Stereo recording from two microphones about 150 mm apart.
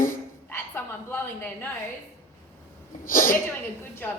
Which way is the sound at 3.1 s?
65° left (ahead or behind).